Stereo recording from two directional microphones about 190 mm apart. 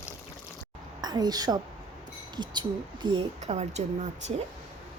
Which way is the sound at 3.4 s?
35° right (ahead or behind).